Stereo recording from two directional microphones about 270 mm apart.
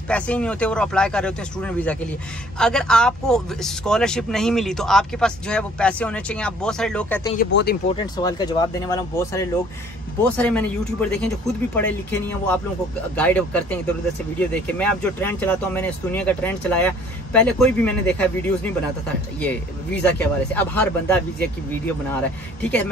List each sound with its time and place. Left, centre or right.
0.1 s speech: centre
7.3 s speech: left
7.9 s speech: centre
19.4 s speech: centre
22.6 s speech: centre